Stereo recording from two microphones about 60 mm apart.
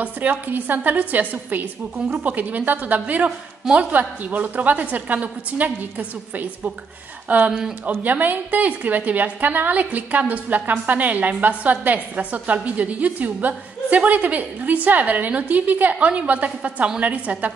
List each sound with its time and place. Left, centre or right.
0.0 s a woman's voice: right